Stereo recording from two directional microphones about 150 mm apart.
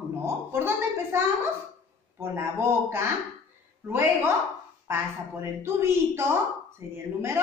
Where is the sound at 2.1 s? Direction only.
15° right (ahead or behind).